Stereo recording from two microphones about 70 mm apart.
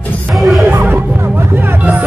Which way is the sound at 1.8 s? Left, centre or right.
Right.